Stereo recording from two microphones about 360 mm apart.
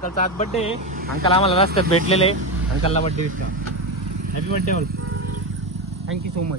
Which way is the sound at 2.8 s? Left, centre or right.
Centre.